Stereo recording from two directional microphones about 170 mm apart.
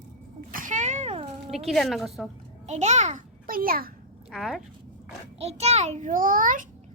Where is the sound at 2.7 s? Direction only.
40° right (ahead or behind); by 3.9 s 60° right (ahead or behind).